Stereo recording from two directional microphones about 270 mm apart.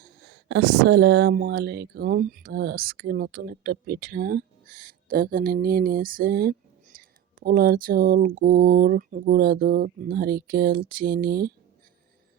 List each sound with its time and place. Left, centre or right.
0.0 s speech: right